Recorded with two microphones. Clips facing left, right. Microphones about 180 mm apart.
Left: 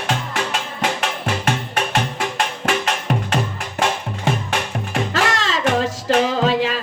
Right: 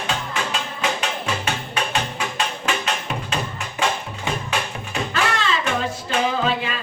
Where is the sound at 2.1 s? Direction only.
60° left (ahead or behind).